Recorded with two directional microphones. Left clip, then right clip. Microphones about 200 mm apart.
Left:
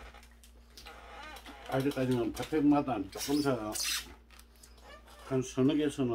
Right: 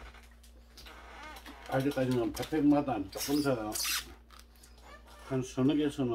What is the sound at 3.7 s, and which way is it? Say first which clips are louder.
Filing: right 1 dB; 15° right (ahead or behind).